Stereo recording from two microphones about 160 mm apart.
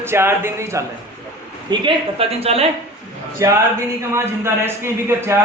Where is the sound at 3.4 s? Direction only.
20° right (ahead or behind).